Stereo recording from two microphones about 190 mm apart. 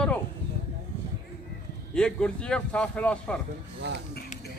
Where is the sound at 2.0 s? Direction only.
5° left (ahead or behind).